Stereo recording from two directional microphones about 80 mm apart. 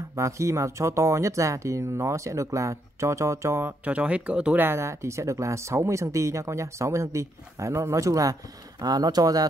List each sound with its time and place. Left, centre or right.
0.1 s speech: right
3.8 s speech: centre
4.6 s speech: right
8.8 s speech: right